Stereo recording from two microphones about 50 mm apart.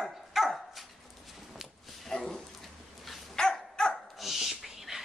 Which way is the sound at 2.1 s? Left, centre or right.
Centre.